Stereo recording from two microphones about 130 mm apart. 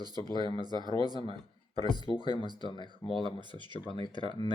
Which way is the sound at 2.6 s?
35° left (ahead or behind).